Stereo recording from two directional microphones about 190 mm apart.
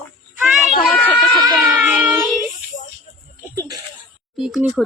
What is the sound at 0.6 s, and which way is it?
Speech, 45° left (ahead or behind).